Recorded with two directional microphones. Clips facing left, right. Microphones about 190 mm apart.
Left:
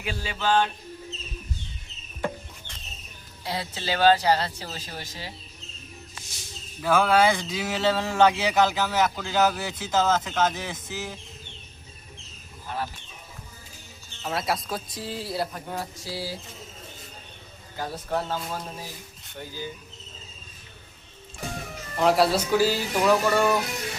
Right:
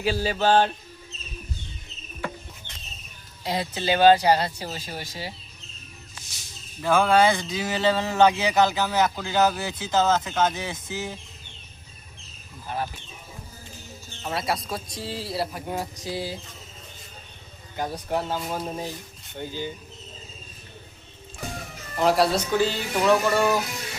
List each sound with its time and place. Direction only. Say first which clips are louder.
0.0 s music: right 6 dB; 35° right (ahead or behind)
3.4 s speech: right 5 dB; 15° right (ahead or behind)
6.8 s a man's voice: right 1 dB; 5° left (ahead or behind)
12.6 s a sound: right 2 dB; 15° right (ahead or behind)
14.3 s a man's voice: even; centre (ahead or behind)
15.6 s a sound: right 3 dB; 15° right (ahead or behind)
17.7 s speech: right 2 dB; 15° right (ahead or behind)
19.4 s a sound: right 4 dB; 20° right (ahead or behind)
21.9 s a man's voice: even; centre (ahead or behind)